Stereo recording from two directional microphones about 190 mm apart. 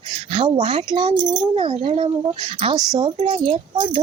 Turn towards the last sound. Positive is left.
turn(degrees=-25)  # may be behind; listen again after turning